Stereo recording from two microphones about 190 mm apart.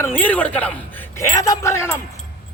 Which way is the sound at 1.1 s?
20° left (ahead or behind).